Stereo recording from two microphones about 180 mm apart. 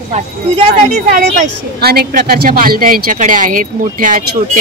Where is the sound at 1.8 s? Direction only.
60° right (ahead or behind).